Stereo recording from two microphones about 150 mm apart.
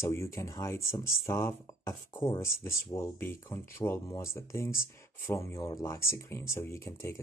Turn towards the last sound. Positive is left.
turn(degrees=20)  # may be behind; listen again after turning